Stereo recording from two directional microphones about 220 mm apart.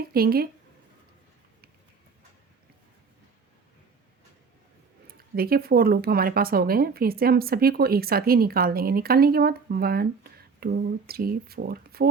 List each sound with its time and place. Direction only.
0.1 s speech: 45° right (ahead or behind)
5.0 s speech: 45° right (ahead or behind)